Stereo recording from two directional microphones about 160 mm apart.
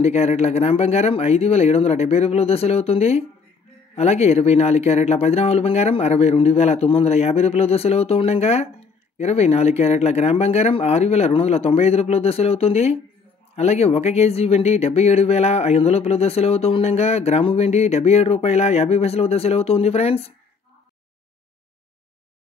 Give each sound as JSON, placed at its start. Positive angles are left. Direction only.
{"t": 0.0, "sound": "speech", "side_deg": 40}